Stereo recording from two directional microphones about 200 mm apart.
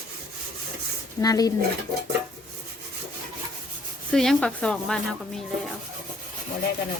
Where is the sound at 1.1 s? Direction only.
20° left (ahead or behind).